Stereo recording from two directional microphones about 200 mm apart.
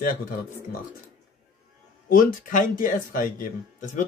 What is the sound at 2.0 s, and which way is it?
Speech, 45° left (ahead or behind).